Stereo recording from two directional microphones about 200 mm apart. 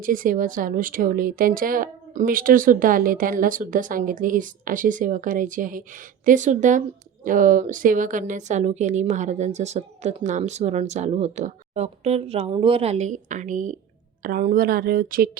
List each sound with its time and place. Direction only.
0.0 s speech: 40° right (ahead or behind)